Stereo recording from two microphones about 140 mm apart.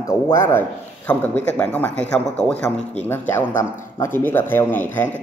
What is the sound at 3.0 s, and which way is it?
A man's voice, 15° left (ahead or behind).